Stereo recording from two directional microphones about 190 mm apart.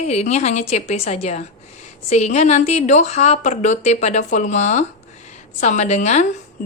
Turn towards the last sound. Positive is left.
turn(degrees=40)  # may be behind; listen again after turning